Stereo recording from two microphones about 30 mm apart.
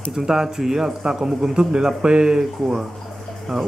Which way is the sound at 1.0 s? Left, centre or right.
Right.